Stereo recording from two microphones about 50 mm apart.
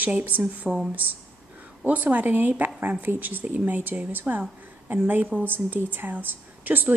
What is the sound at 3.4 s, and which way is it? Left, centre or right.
A woman's voice, right.